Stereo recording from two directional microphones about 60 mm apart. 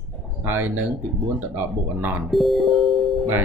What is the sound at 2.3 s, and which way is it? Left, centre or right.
Speech, centre.